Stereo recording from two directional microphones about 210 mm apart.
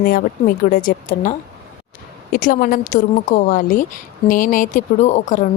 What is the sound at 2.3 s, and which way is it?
A woman's voice, 40° left (ahead or behind).